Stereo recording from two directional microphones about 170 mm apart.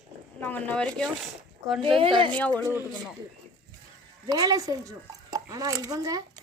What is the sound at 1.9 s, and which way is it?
Speech, 30° right (ahead or behind).